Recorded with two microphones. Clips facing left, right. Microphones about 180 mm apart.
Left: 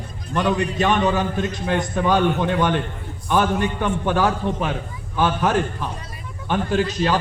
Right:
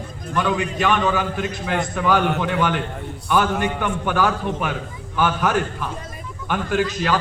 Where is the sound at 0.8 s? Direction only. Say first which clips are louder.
Even; 25° left (ahead or behind).